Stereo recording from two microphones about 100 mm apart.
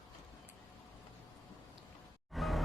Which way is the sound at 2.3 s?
Centre (ahead or behind).